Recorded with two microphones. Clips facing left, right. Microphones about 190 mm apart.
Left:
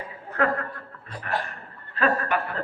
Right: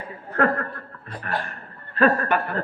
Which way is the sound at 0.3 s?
50° right (ahead or behind).